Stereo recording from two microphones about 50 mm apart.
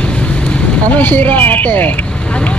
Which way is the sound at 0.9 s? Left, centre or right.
Left.